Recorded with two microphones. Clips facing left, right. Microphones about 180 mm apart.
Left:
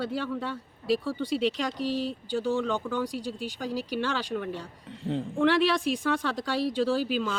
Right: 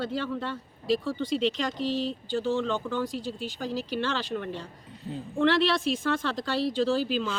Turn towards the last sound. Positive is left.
turn(degrees=10)  # may be behind; listen again after turning